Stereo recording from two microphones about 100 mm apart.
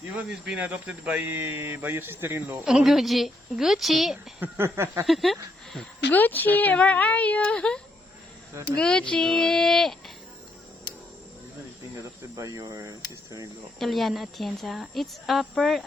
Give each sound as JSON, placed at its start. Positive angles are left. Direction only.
{"t": 0.2, "sound": "speech", "side_deg": -15}
{"t": 2.6, "sound": "a woman's voice", "side_deg": -5}
{"t": 4.4, "sound": "speech", "side_deg": -25}
{"t": 5.0, "sound": "a woman's voice", "side_deg": 0}
{"t": 6.1, "sound": "a woman's voice", "side_deg": 20}
{"t": 12.4, "sound": "speech", "side_deg": -35}
{"t": 13.7, "sound": "a woman's voice", "side_deg": 0}